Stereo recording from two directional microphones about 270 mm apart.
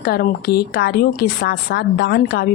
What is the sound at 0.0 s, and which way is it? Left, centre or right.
A woman's voice, left.